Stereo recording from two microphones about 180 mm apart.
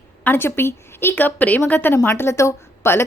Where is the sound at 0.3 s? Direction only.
10° left (ahead or behind).